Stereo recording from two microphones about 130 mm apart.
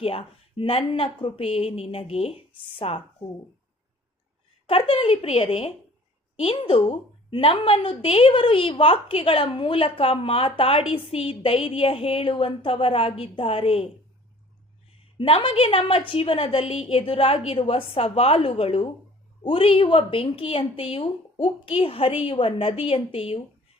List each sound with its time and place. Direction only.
0.0 s a woman's voice: 45° left (ahead or behind)
4.6 s a woman's voice: 45° left (ahead or behind)
15.2 s a woman's voice: 45° left (ahead or behind)